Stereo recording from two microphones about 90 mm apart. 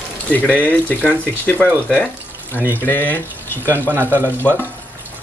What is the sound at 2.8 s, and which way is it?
Speech, 25° left (ahead or behind).